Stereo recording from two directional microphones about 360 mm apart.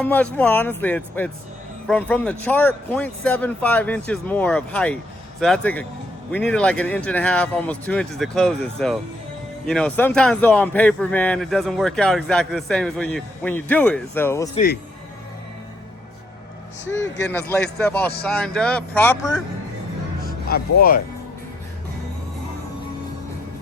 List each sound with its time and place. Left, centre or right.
0.0 s speech: centre
17.2 s speech: centre
20.2 s music: left